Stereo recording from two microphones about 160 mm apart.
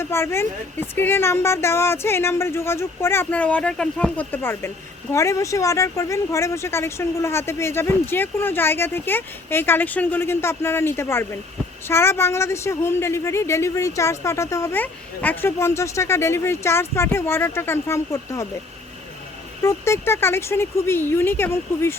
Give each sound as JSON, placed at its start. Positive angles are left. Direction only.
{"t": 0.0, "sound": "a woman's voice", "side_deg": 15}
{"t": 19.6, "sound": "a woman's voice", "side_deg": 15}